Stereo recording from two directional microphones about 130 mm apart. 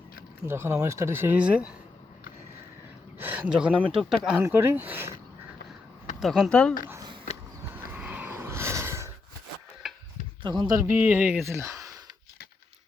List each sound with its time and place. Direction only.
0.4 s speech: 20° right (ahead or behind)
3.2 s a sound: 15° right (ahead or behind)
3.9 s speech: 5° right (ahead or behind)
4.4 s speech: 15° right (ahead or behind)
6.1 s speech: 5° right (ahead or behind)
6.5 s speech: 5° left (ahead or behind)
7.7 s a sound: 10° right (ahead or behind)
9.8 s a sound: 5° right (ahead or behind)
10.6 s music: 30° right (ahead or behind)
10.8 s speech: 15° right (ahead or behind)
11.4 s music: 20° right (ahead or behind)